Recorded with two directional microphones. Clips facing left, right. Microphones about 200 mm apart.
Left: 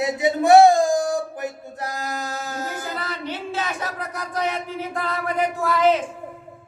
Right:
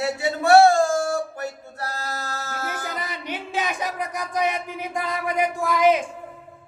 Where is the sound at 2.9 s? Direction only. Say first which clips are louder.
Left 2 dB; 15° right (ahead or behind).